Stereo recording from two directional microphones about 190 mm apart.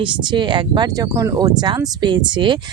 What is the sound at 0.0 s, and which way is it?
Speech, 25° right (ahead or behind).